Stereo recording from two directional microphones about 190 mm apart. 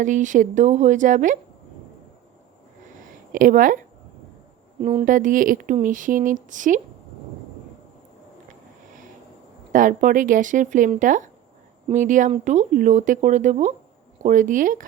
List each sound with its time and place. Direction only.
0.0 s speech: 40° right (ahead or behind)
3.3 s speech: 45° right (ahead or behind)
4.8 s speech: 30° right (ahead or behind)
5.0 s speech: 45° right (ahead or behind)
9.7 s speech: 45° right (ahead or behind)